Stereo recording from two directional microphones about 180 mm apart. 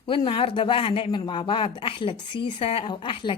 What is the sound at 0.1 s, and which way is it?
Speech, 30° left (ahead or behind).